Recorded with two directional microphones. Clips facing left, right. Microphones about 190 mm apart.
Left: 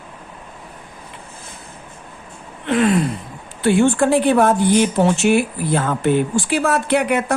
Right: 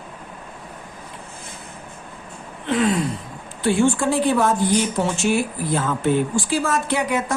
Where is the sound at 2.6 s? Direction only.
60° left (ahead or behind).